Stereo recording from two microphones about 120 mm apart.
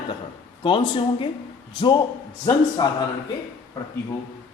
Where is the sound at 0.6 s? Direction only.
45° left (ahead or behind).